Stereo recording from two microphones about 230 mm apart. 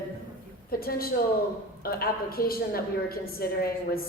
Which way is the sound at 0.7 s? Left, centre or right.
Left.